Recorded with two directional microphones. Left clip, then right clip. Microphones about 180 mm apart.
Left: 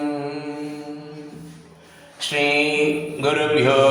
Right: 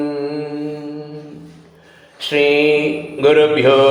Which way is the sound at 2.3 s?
25° right (ahead or behind).